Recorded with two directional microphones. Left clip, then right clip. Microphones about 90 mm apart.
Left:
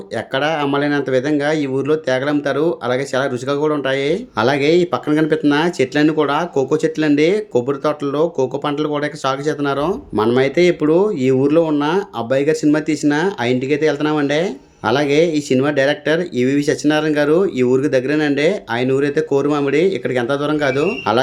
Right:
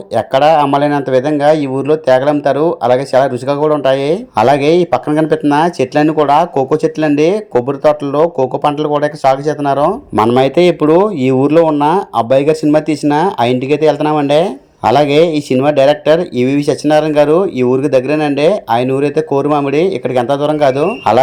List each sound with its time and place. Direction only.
0.2 s speech: 50° right (ahead or behind); by 9.9 s 30° right (ahead or behind)
10.3 s speech: 60° right (ahead or behind); by 20.9 s 35° right (ahead or behind)